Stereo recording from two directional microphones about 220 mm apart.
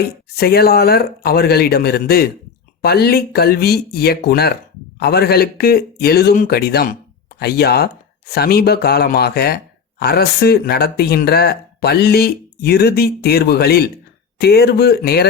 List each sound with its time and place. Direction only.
0.0 s speech: 45° left (ahead or behind)